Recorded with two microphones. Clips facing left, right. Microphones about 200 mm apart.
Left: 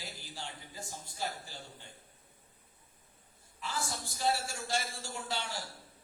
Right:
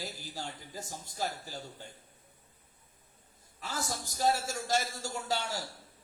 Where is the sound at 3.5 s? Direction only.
40° right (ahead or behind).